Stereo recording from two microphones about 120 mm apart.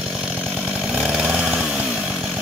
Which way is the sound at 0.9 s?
5° right (ahead or behind).